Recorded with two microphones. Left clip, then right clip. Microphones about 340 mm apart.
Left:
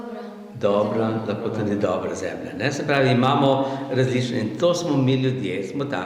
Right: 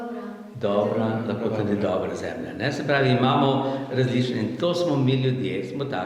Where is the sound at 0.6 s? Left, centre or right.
Left.